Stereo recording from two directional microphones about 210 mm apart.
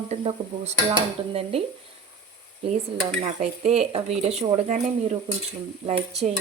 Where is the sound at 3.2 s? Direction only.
35° right (ahead or behind).